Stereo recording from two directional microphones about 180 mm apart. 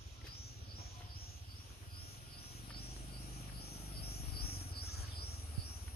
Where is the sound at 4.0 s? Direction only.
60° left (ahead or behind).